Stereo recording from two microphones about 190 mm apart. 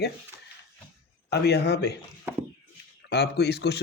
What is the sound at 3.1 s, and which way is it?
Speech, 60° left (ahead or behind).